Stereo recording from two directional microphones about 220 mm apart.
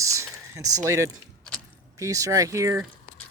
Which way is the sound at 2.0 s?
15° right (ahead or behind).